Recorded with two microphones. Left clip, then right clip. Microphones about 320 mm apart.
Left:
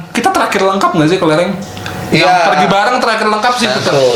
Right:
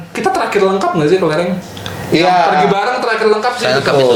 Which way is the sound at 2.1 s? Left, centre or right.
Centre.